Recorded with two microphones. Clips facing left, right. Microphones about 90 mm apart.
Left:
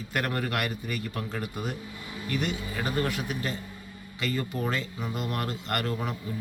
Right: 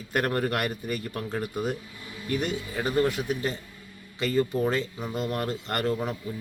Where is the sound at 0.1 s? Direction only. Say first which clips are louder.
Right 4 dB; 40° right (ahead or behind).